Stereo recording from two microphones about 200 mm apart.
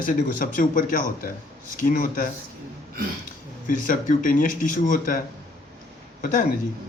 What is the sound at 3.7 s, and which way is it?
Speech, 40° left (ahead or behind).